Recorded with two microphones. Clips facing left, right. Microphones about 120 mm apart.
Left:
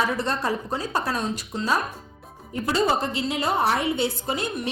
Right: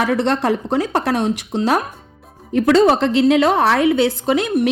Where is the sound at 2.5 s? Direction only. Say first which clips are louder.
Right 10 dB; 85° right.